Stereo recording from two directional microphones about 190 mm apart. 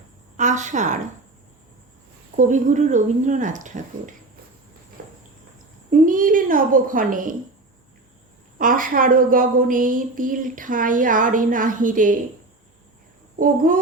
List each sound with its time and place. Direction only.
0.3 s a woman's voice: 40° right (ahead or behind)
2.3 s speech: 40° right (ahead or behind)
5.9 s a woman's voice: 45° right (ahead or behind)
8.5 s a woman's voice: 45° right (ahead or behind)